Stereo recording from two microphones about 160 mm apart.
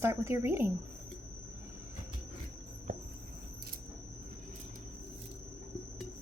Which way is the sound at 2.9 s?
55° right (ahead or behind).